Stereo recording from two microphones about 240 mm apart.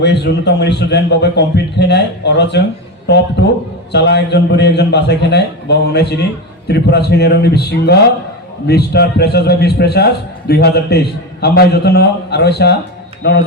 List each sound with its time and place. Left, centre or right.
0.0 s a man's voice: left